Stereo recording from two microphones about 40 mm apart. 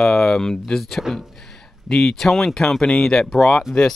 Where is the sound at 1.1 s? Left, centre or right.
Centre.